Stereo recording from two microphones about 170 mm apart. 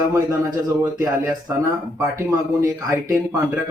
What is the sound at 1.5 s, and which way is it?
Speech, 15° right (ahead or behind).